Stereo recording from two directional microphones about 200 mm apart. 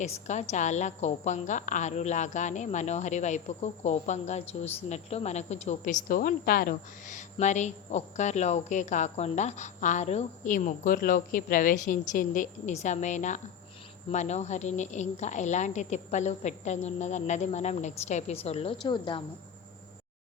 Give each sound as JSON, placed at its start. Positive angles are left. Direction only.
{"t": 0.0, "sound": "a woman's voice", "side_deg": 35}